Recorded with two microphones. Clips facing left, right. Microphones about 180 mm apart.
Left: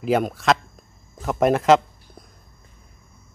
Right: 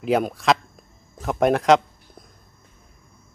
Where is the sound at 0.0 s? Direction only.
Centre (ahead or behind).